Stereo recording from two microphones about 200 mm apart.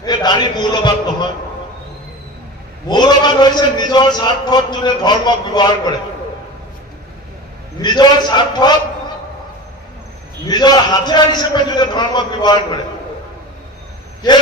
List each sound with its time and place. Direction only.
0.0 s a man's voice: 20° left (ahead or behind)
2.9 s a man's voice: 20° left (ahead or behind)
7.8 s a man's voice: 20° left (ahead or behind)
10.4 s a man's voice: 20° left (ahead or behind)